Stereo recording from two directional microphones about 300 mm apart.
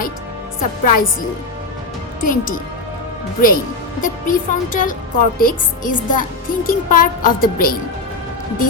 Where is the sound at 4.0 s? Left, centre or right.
Left.